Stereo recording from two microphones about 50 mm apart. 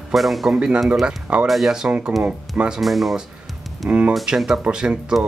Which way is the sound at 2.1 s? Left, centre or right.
Centre.